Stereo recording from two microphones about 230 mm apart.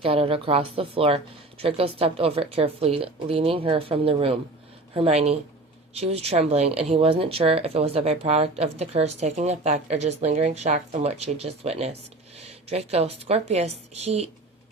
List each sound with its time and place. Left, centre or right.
0.0 s speech: right